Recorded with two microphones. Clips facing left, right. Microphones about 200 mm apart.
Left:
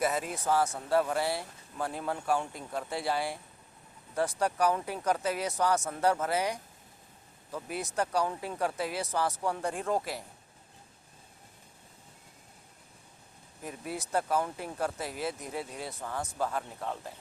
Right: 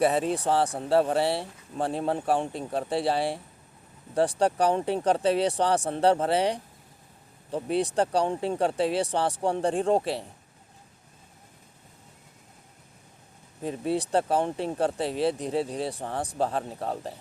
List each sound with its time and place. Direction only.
0.0 s speech: 30° right (ahead or behind)
13.6 s speech: 30° right (ahead or behind)